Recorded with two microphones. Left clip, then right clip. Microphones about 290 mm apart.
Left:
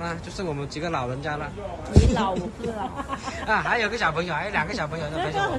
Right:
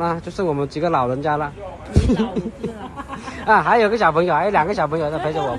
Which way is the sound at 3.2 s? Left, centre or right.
Centre.